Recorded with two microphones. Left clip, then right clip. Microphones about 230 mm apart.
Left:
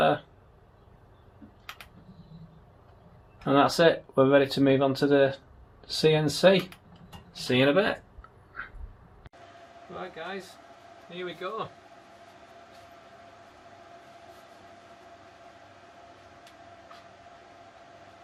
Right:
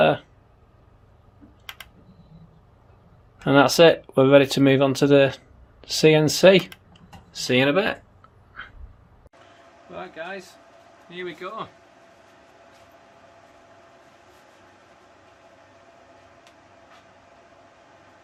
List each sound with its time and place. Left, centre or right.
3.4 s speech: right
7.3 s speech: right